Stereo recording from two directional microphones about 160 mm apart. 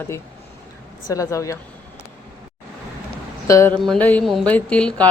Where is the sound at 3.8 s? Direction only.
5° left (ahead or behind).